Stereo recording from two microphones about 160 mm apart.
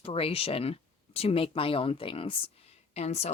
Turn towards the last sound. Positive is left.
turn(degrees=40)  # may be behind; listen again after turning